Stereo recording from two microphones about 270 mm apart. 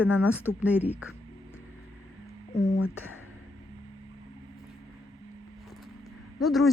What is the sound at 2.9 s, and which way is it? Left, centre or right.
Speech, left.